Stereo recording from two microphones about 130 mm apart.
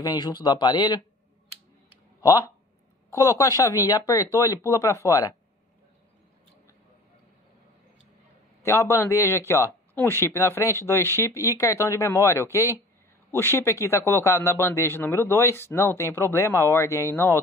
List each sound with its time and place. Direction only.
0.0 s speech: 30° left (ahead or behind)
3.1 s speech: 25° left (ahead or behind)
8.6 s speech: 20° left (ahead or behind)